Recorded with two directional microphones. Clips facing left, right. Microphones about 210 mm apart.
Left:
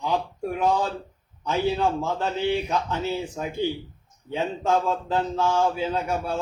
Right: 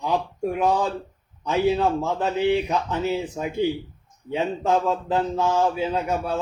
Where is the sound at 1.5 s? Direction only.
20° right (ahead or behind).